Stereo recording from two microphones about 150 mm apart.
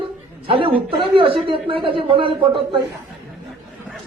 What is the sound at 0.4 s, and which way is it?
A woman's voice, 35° right (ahead or behind).